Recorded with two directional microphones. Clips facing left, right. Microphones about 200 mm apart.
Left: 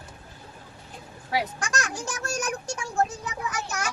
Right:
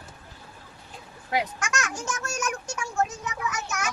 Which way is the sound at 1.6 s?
35° left (ahead or behind).